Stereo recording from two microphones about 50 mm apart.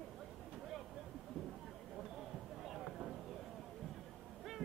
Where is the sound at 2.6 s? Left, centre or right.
Centre.